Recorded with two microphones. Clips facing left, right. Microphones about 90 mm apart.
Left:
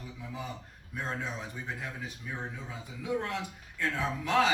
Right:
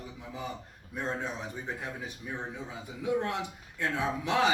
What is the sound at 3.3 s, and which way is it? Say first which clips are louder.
Speech: right 1 dB; 20° right (ahead or behind).